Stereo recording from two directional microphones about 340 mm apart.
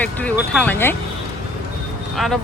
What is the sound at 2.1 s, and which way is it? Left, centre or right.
Speech, centre.